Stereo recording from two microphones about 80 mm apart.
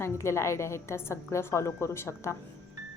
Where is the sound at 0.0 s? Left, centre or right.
Left.